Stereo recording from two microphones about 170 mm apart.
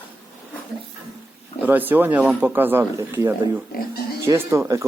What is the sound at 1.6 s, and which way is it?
Speech, 10° right (ahead or behind).